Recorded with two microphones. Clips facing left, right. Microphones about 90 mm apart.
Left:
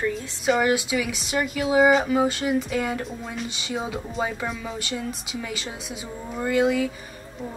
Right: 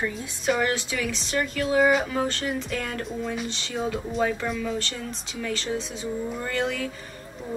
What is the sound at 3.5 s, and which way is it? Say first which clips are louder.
Speech: right 1 dB; 10° left (ahead or behind).